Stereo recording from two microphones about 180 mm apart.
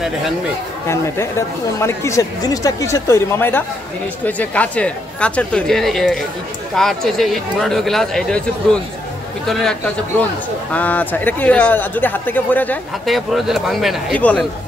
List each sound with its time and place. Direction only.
0.8 s speech: 15° left (ahead or behind)
9.5 s speech: 5° left (ahead or behind)